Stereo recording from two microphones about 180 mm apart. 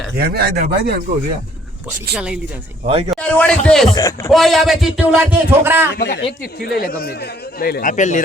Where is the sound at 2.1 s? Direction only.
5° right (ahead or behind).